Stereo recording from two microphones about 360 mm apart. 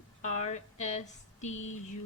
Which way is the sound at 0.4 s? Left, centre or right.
Centre.